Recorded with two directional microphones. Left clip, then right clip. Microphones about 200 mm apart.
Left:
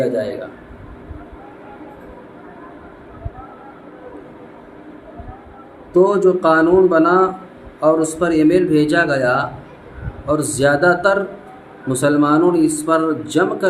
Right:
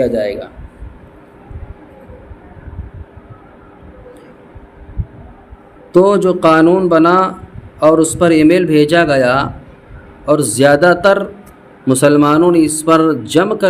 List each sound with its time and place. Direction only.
5.9 s speech: 55° right (ahead or behind)